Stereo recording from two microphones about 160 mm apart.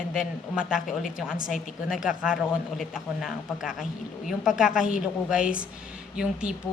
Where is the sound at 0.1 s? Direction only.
5° right (ahead or behind).